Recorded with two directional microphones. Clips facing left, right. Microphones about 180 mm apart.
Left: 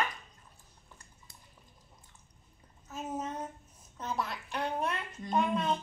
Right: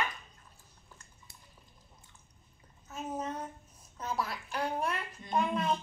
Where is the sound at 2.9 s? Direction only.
5° left (ahead or behind).